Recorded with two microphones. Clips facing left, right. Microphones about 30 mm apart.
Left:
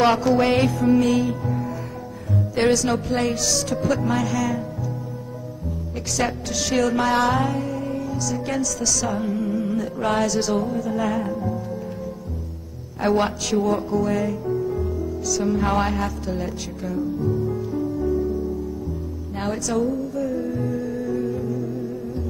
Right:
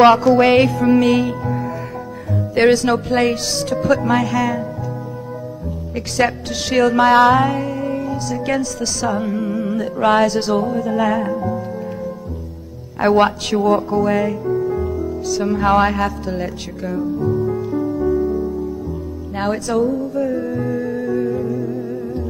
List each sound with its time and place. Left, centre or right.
0.1 s music: centre
0.4 s music: right
2.3 s music: right
3.4 s music: right
3.7 s music: right
6.1 s music: right
7.0 s music: right
8.0 s music: right
13.2 s music: right
15.8 s music: right
17.3 s music: right
19.3 s speech: right
19.8 s music: right